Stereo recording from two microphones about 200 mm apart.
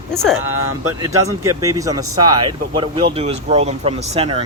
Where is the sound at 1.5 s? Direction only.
15° right (ahead or behind).